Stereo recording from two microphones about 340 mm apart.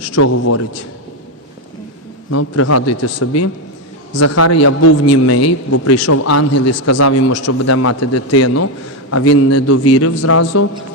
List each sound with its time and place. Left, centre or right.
0.0 s a man's voice: left
2.3 s a man's voice: left